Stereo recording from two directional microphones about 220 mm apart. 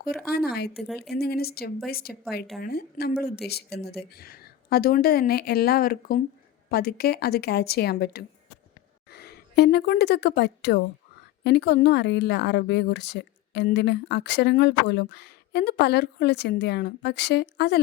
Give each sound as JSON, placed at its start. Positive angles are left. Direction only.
{"t": 0.3, "sound": "a woman's voice", "side_deg": 45}